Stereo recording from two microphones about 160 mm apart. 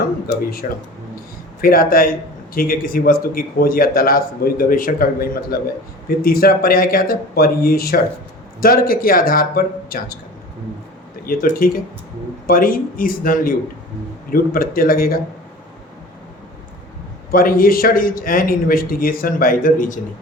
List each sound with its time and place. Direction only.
0.6 s speech: 60° left (ahead or behind)
11.3 s speech: 60° left (ahead or behind)
17.3 s speech: 65° left (ahead or behind)